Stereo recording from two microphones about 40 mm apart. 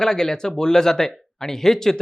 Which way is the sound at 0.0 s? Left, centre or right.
Centre.